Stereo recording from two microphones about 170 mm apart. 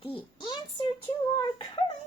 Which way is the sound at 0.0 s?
30° left (ahead or behind).